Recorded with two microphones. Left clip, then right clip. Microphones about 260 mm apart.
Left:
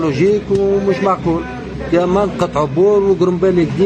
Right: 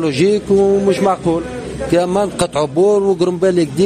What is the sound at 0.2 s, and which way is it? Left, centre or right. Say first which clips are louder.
Speech: even; right.